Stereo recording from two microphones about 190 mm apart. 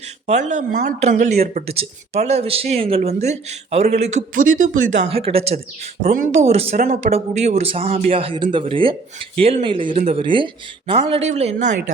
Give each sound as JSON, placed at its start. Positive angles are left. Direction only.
{"t": 0.3, "sound": "speech", "side_deg": -40}
{"t": 1.6, "sound": "speech", "side_deg": -30}